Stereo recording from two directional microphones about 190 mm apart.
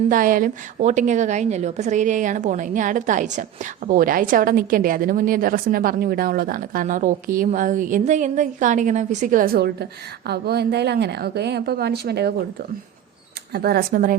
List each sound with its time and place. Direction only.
0.1 s a woman's voice: 45° right (ahead or behind)
13.5 s a woman's voice: 55° right (ahead or behind)